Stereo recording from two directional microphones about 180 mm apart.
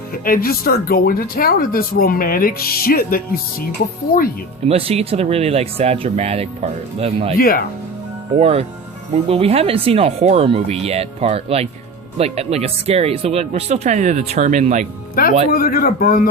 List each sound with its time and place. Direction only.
0.1 s speech: 55° left (ahead or behind)
4.7 s speech: 35° right (ahead or behind)
7.3 s speech: 55° left (ahead or behind)
8.4 s speech: 35° right (ahead or behind)
15.4 s speech: 55° left (ahead or behind)